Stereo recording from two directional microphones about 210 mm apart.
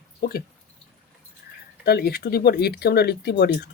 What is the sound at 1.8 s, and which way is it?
Speech, 50° left (ahead or behind).